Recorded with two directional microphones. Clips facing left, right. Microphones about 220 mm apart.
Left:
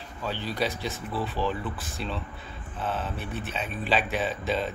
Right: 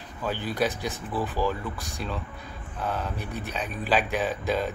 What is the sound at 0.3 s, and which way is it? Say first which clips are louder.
Speech: right 2 dB; 50° right (ahead or behind).